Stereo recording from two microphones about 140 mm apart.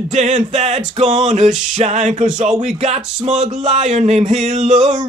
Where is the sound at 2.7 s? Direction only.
50° right (ahead or behind).